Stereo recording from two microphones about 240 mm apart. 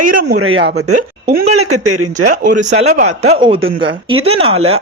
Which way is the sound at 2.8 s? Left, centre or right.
Right.